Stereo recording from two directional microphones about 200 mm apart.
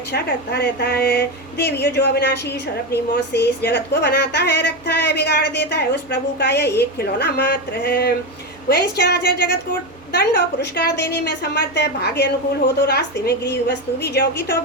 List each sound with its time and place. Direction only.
0.1 s speech: 55° left (ahead or behind)